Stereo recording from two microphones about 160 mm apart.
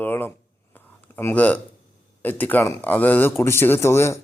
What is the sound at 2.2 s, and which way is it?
A man's voice, 10° left (ahead or behind).